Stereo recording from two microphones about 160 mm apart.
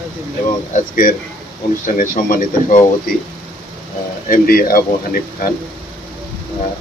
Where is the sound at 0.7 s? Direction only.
60° left (ahead or behind).